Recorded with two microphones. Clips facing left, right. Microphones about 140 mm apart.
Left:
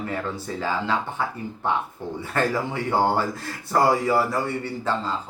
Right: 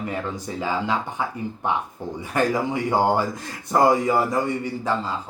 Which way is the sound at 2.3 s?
15° right (ahead or behind).